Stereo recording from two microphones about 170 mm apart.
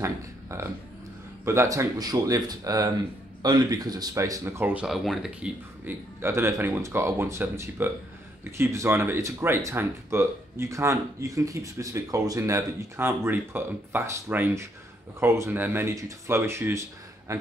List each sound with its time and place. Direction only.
0.0 s speech: 15° right (ahead or behind)